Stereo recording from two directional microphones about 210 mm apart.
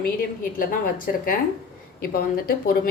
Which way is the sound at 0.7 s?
40° left (ahead or behind).